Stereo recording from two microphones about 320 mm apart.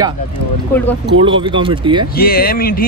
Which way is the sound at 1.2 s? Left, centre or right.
Centre.